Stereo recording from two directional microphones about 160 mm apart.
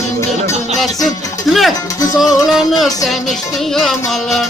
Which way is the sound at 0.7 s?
Centre (ahead or behind).